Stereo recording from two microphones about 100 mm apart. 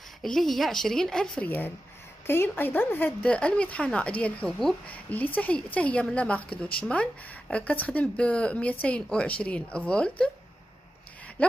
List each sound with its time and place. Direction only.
0.2 s a woman's voice: centre (ahead or behind)
1.4 s a woman's voice: 20° left (ahead or behind)
4.8 s a woman's voice: 15° left (ahead or behind)